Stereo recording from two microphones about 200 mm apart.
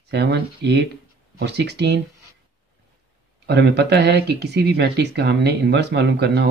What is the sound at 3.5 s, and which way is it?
Speech, 55° right (ahead or behind).